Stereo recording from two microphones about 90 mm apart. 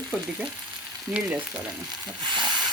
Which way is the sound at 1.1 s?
15° right (ahead or behind).